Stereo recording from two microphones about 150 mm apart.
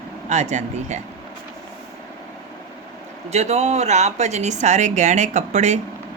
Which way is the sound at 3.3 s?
45° right (ahead or behind).